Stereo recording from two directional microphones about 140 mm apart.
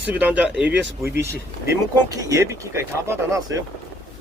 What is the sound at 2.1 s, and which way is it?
Speech, 25° right (ahead or behind).